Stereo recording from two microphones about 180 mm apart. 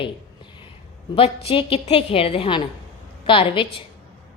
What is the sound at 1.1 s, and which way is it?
A woman's voice, 30° left (ahead or behind).